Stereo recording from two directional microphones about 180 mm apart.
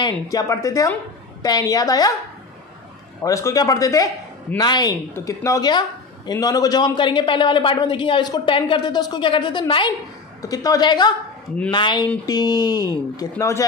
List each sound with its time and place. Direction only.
0.0 s a woman's voice: 20° left (ahead or behind)
3.2 s a woman's voice: 15° left (ahead or behind)